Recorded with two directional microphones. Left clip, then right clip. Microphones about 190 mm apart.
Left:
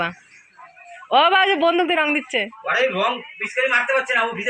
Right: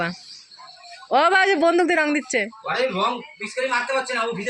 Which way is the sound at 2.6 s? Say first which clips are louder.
Left 5 dB; 50° right (ahead or behind).